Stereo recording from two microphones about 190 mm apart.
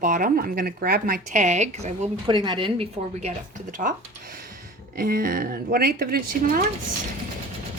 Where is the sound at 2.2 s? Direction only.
25° right (ahead or behind).